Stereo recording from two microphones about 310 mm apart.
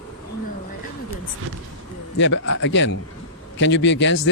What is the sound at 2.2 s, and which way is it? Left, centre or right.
Speech, left.